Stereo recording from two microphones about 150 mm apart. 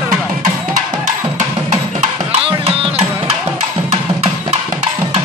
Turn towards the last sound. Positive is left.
turn(degrees=-45)  # may be behind; listen again after turning